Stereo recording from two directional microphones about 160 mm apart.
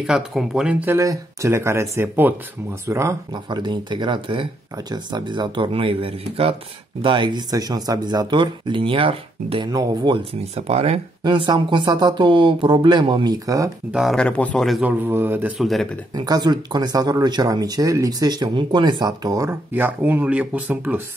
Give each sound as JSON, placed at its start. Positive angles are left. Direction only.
{"t": 0.0, "sound": "speech", "side_deg": 0}
{"t": 10.5, "sound": "speech", "side_deg": -40}
{"t": 13.9, "sound": "speech", "side_deg": 0}
{"t": 14.8, "sound": "speech", "side_deg": -10}
{"t": 16.2, "sound": "speech", "side_deg": -25}